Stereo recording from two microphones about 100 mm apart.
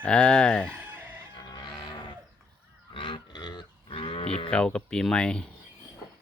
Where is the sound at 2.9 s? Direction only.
60° left (ahead or behind); by 4.4 s 80° left.